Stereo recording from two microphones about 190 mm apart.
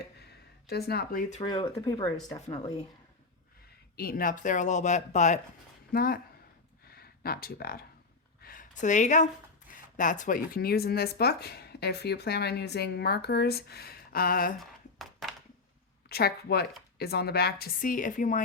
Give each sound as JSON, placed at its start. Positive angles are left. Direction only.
{"t": 0.7, "sound": "a woman's voice", "side_deg": 55}
{"t": 1.6, "sound": "speech", "side_deg": 20}
{"t": 3.9, "sound": "speech", "side_deg": 50}
{"t": 5.9, "sound": "speech", "side_deg": 50}
{"t": 14.6, "sound": "a sound", "side_deg": 0}
{"t": 16.0, "sound": "a woman's voice", "side_deg": 55}